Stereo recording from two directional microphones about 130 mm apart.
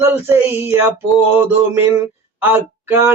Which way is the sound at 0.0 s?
15° right (ahead or behind).